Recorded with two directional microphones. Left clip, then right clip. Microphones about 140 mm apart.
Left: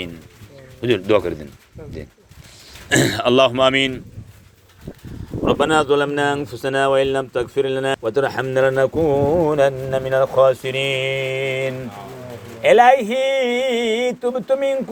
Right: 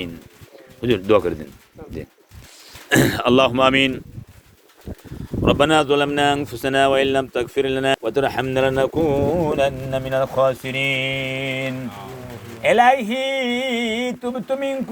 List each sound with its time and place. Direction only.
0.8 s speech: 20° right (ahead or behind)
2.9 s speech: 30° right (ahead or behind)
5.5 s speech: 30° right (ahead or behind)
9.4 s speech: 10° left (ahead or behind)